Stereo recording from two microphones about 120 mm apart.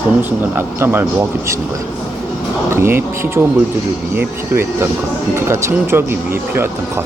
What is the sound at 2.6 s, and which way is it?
Speech, 20° right (ahead or behind).